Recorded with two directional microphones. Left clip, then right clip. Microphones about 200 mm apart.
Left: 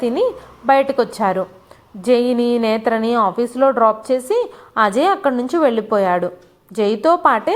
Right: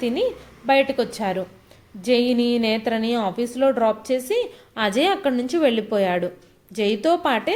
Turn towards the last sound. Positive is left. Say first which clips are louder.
# left 6 dB
turn(degrees=0)  # may be behind; listen again after turning